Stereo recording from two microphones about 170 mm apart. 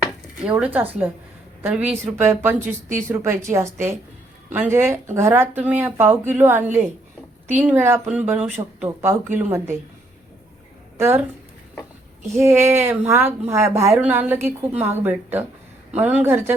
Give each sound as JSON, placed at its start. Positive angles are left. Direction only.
{"t": 0.0, "sound": "speech", "side_deg": -10}
{"t": 10.9, "sound": "speech", "side_deg": -15}
{"t": 12.3, "sound": "speech", "side_deg": -15}